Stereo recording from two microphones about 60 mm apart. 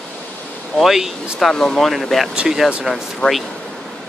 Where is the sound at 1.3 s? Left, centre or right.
Centre.